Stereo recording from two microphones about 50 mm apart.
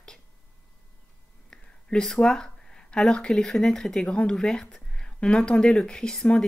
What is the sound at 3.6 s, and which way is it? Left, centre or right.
Speech, centre.